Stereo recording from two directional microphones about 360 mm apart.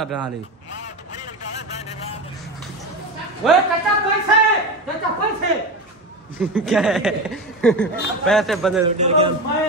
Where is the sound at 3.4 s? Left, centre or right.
Centre.